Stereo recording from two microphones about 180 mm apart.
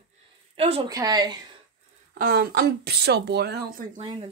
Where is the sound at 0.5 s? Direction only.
30° right (ahead or behind).